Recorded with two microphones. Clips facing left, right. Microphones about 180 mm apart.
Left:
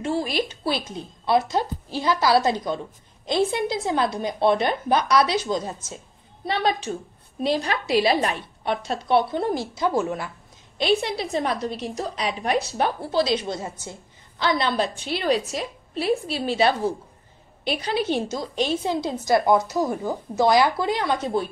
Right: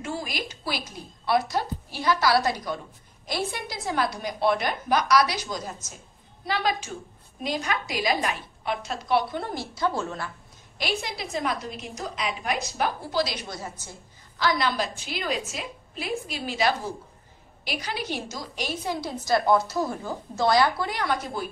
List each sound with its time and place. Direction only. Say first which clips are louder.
0.0 s a woman's voice: left 8 dB; 30° left (ahead or behind); by 10.3 s 15° left (ahead or behind)
10.8 s a woman's voice: left 8 dB; 30° left (ahead or behind)